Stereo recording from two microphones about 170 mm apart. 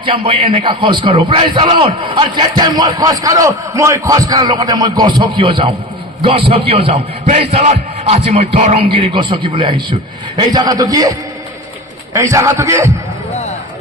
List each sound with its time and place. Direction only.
0.0 s a man's voice: 30° right (ahead or behind)
6.7 s a man's voice: 40° right (ahead or behind); by 12.9 s 20° right (ahead or behind)